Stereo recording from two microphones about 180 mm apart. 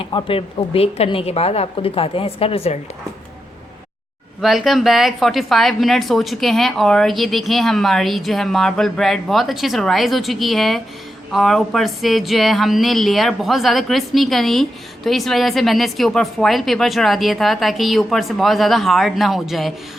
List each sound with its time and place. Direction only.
0.1 s a woman's voice: 30° left (ahead or behind)
4.4 s speech: centre (ahead or behind)